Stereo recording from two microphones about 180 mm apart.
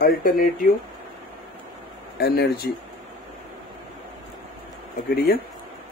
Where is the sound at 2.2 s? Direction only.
60° left (ahead or behind).